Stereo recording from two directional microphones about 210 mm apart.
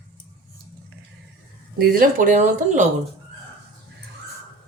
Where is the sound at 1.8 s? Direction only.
45° right (ahead or behind).